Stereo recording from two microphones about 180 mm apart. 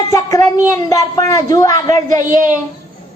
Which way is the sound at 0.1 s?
20° left (ahead or behind).